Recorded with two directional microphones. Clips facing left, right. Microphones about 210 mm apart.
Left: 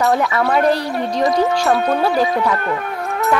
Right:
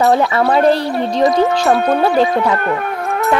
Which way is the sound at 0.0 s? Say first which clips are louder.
Right 4 dB; 30° right (ahead or behind).